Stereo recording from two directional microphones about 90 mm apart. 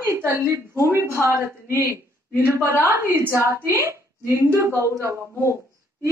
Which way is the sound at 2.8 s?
25° right (ahead or behind).